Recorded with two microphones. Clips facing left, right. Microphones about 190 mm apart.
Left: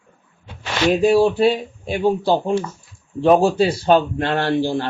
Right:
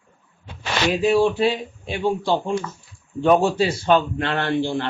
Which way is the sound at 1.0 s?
35° left (ahead or behind).